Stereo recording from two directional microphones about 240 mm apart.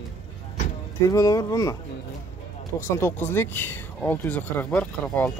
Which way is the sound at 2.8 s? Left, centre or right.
Centre.